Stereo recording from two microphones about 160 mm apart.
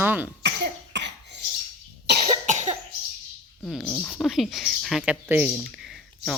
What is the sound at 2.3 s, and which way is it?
Cough, 50° right (ahead or behind).